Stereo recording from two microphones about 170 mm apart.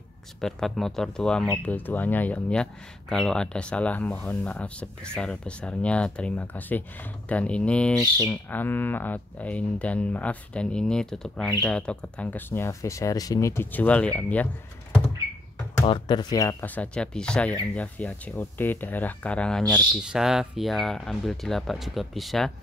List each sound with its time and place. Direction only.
0.4 s speech: centre (ahead or behind)
15.8 s speech: 30° left (ahead or behind)
16.6 s speech: 10° left (ahead or behind)
19.7 s speech: 5° right (ahead or behind)